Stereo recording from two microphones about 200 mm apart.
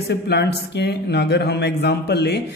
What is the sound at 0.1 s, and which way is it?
Speech, 55° left (ahead or behind).